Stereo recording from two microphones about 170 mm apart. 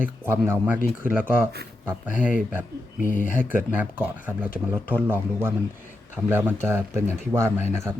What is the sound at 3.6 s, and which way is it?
Speech, 10° right (ahead or behind).